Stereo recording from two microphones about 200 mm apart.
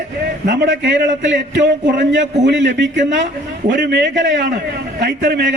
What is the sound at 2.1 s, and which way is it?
A man's voice, 65° right (ahead or behind).